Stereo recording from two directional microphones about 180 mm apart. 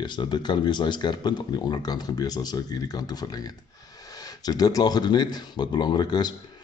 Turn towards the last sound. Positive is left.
turn(degrees=25)  # may be behind; listen again after turning